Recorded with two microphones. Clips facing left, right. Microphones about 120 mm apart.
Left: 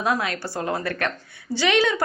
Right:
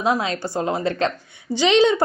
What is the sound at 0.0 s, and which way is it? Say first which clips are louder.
A woman's voice: right 3 dB; 20° right (ahead or behind).